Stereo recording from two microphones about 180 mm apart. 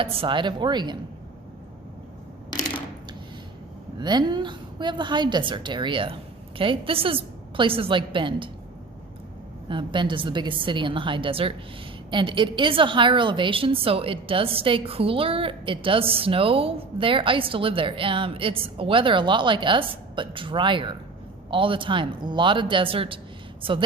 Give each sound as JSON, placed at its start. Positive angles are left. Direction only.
{"t": 0.0, "sound": "a woman's voice", "side_deg": -30}
{"t": 2.5, "sound": "a sound", "side_deg": 25}
{"t": 3.9, "sound": "a woman's voice", "side_deg": -25}
{"t": 9.6, "sound": "a woman's voice", "side_deg": -25}